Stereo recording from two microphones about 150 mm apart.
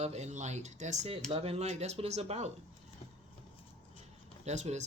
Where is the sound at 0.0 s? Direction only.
45° right (ahead or behind).